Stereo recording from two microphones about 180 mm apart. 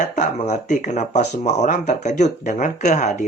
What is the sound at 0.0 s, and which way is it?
Speech, 40° left (ahead or behind).